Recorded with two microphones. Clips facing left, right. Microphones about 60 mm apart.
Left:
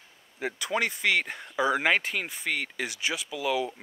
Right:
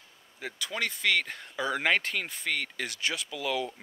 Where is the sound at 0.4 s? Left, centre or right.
Left.